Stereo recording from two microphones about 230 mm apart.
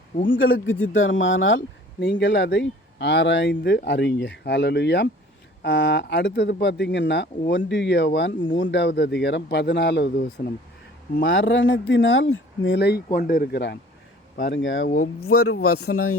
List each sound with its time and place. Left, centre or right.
0.3 s speech: left
14.8 s speech: left
15.3 s speech: left